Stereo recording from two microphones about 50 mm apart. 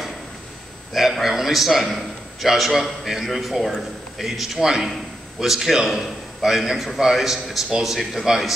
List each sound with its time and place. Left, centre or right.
1.2 s a man's voice: centre